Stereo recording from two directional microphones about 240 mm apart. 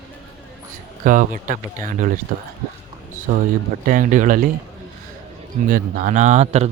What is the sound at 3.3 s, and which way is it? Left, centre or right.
Speech, right.